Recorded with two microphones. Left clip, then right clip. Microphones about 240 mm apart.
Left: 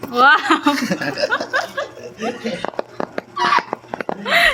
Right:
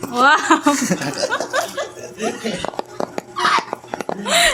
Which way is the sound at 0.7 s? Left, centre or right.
Right.